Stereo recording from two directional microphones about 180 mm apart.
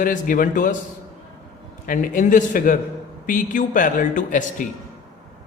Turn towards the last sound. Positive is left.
turn(degrees=50)  # may be behind; listen again after turning